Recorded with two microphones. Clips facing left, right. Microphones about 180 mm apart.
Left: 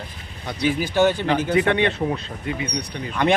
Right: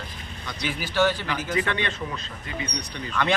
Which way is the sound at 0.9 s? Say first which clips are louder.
Left 3 dB; 20° left (ahead or behind).